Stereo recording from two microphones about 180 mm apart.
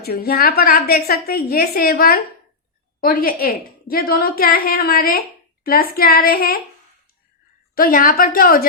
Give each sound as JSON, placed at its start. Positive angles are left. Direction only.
{"t": 0.0, "sound": "a woman's voice", "side_deg": 60}
{"t": 7.8, "sound": "a woman's voice", "side_deg": 50}